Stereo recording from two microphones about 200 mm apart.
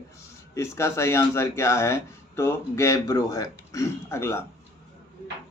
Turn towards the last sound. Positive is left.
turn(degrees=15)  # may be behind; listen again after turning